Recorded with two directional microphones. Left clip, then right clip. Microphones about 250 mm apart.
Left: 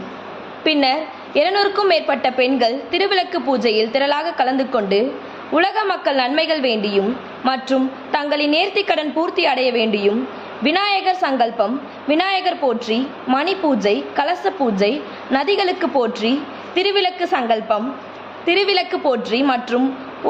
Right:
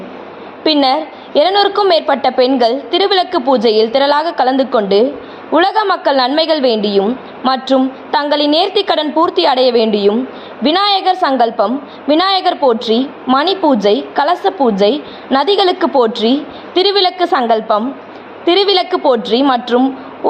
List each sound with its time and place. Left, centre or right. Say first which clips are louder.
0.6 s a woman's voice: right 5 dB; centre